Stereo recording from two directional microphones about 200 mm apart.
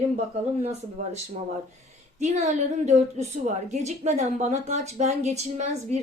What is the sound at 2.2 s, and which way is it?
Speech, 35° right (ahead or behind).